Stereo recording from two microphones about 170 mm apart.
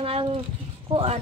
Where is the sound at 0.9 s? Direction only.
35° right (ahead or behind).